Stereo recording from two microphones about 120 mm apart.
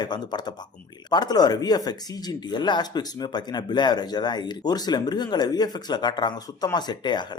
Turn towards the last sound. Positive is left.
turn(degrees=40)  # may be behind; listen again after turning